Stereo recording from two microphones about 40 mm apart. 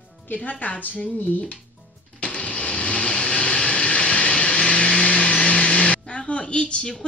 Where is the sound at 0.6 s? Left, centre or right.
Left.